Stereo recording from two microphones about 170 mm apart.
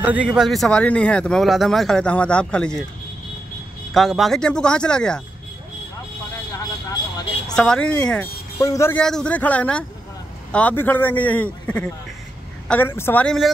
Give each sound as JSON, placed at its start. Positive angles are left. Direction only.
{"t": 0.0, "sound": "speech", "side_deg": -10}
{"t": 3.9, "sound": "speech", "side_deg": 0}
{"t": 6.5, "sound": "vehicle", "side_deg": 25}
{"t": 7.4, "sound": "speech", "side_deg": 5}
{"t": 8.5, "sound": "a man's voice", "side_deg": 15}
{"t": 8.9, "sound": "a man's voice", "side_deg": 5}